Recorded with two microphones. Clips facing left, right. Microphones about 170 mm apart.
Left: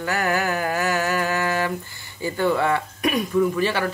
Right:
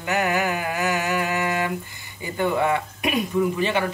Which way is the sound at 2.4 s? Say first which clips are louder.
Left 1 dB; 15° right (ahead or behind).